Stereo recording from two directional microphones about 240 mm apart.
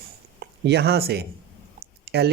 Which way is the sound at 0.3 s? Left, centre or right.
Right.